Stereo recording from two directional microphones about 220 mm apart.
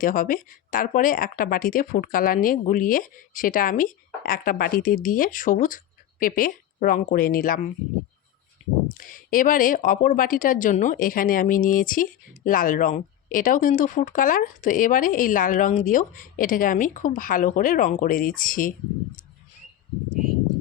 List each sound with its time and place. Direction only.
0.0 s speech: 40° left (ahead or behind)
9.0 s speech: 40° left (ahead or behind)